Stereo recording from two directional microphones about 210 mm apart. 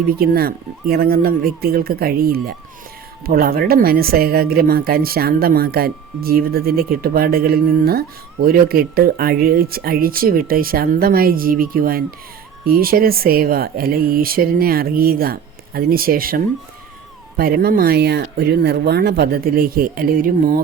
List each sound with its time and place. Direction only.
0.1 s a woman's voice: 45° right (ahead or behind)